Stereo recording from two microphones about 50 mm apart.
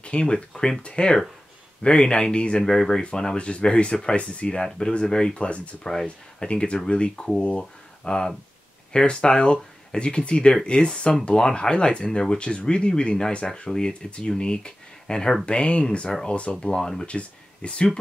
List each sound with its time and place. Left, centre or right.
0.0 s speech: centre